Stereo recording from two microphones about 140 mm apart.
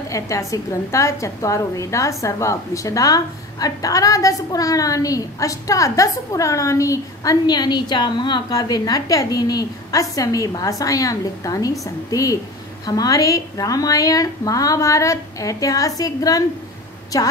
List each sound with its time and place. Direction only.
0.1 s a woman's voice: 20° left (ahead or behind)